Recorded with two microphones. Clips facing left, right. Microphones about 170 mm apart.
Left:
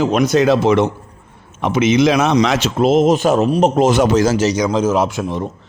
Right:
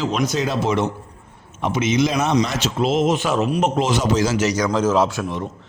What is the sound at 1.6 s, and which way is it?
Speech, 85° left.